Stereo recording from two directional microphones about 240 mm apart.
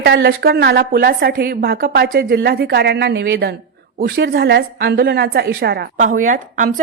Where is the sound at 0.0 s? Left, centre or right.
Right.